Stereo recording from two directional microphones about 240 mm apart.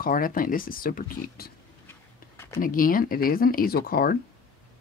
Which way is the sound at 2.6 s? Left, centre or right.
Left.